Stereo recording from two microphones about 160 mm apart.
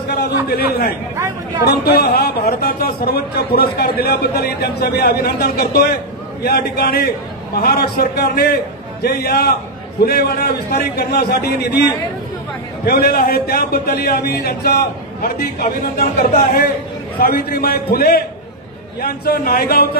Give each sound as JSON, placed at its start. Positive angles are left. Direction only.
{"t": 0.1, "sound": "a man's voice", "side_deg": 75}
{"t": 1.6, "sound": "a man's voice", "side_deg": 80}
{"t": 12.8, "sound": "a man's voice", "side_deg": 70}